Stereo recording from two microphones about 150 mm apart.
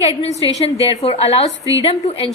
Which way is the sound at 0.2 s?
45° left (ahead or behind).